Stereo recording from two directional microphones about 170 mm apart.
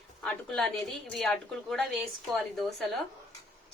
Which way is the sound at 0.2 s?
5° left (ahead or behind).